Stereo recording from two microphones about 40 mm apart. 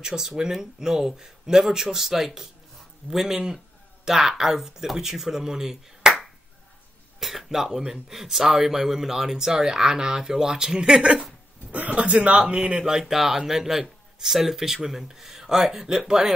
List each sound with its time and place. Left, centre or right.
0.0 s speech: centre
11.7 s speech: right
13.1 s speech: centre